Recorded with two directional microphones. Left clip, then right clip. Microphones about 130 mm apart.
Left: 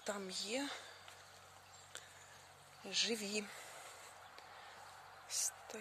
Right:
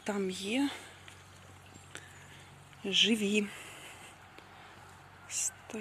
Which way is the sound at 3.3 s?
10° left (ahead or behind).